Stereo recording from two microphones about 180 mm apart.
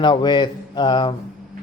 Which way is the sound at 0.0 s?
25° left (ahead or behind).